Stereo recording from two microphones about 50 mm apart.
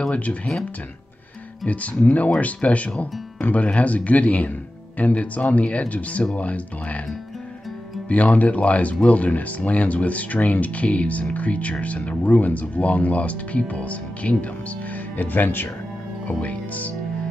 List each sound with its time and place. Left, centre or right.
0.1 s speech: left
1.7 s speech: left
8.1 s speech: left
15.1 s speech: left
16.3 s speech: left